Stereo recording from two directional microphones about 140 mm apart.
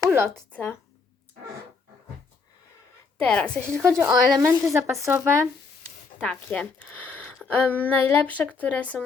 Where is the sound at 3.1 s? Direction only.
5° left (ahead or behind).